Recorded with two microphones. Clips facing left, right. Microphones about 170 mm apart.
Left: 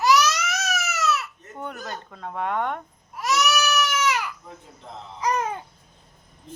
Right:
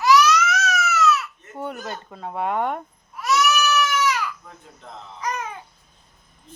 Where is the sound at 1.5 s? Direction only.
5° right (ahead or behind).